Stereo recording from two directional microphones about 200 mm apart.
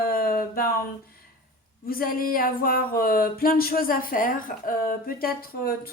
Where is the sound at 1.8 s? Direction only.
45° left (ahead or behind).